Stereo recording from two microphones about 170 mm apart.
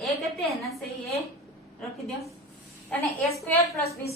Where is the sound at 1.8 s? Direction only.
Centre (ahead or behind).